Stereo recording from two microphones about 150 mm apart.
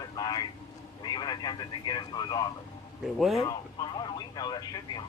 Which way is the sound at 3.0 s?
Centre (ahead or behind).